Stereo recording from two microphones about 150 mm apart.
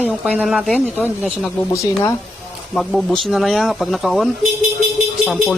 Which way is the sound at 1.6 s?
20° left (ahead or behind).